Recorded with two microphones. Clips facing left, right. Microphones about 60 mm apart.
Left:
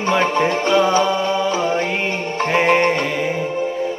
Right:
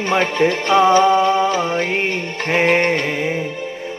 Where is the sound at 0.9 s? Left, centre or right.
Right.